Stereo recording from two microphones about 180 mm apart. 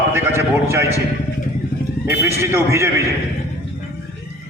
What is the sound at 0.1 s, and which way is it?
Speech, 10° right (ahead or behind).